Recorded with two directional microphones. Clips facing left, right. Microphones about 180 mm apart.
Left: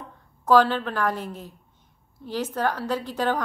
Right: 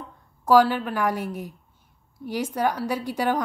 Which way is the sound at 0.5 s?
10° right (ahead or behind).